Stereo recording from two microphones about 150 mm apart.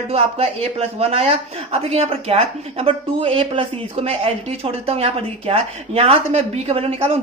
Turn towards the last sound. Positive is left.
turn(degrees=-40)  # may be behind; listen again after turning